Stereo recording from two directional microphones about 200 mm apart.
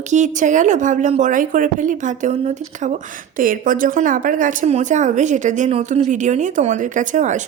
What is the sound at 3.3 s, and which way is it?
Speech, 45° right (ahead or behind).